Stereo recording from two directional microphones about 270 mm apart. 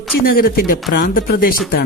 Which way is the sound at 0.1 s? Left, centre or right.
Left.